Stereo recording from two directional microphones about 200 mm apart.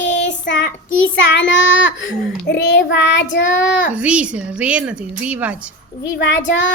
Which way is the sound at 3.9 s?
5° right (ahead or behind).